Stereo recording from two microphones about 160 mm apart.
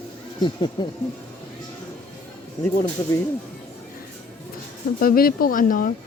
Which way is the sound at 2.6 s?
15° left (ahead or behind).